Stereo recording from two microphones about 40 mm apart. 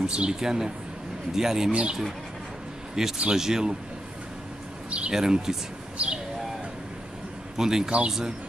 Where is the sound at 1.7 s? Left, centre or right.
Right.